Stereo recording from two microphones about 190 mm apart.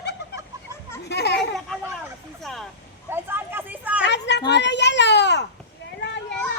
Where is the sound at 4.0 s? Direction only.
65° left (ahead or behind).